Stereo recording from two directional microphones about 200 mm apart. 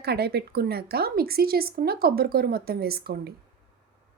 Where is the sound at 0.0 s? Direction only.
50° right (ahead or behind).